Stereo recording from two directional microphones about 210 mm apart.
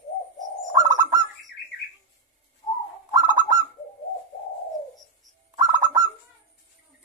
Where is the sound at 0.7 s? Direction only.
15° right (ahead or behind).